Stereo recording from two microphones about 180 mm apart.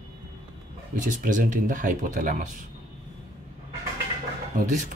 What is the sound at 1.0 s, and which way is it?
Speech, 45° right (ahead or behind).